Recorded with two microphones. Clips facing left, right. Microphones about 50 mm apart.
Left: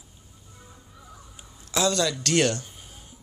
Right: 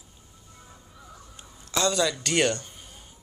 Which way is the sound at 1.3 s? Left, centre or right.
Centre.